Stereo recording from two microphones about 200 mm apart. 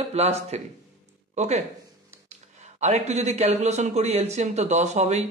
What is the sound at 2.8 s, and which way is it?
Speech, 35° right (ahead or behind).